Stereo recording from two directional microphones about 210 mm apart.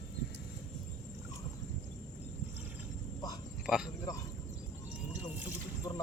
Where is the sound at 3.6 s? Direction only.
Centre (ahead or behind).